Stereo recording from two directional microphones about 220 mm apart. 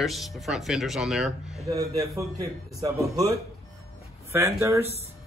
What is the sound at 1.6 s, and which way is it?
A man's voice, 15° right (ahead or behind).